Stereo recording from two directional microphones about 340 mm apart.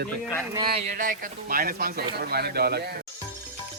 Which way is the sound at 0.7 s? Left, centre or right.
Right.